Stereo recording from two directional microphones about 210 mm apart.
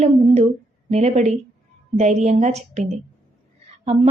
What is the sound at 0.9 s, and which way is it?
A woman's voice, 30° right (ahead or behind).